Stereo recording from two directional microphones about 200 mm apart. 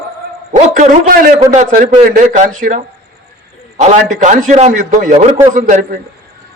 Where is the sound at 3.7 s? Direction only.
35° right (ahead or behind).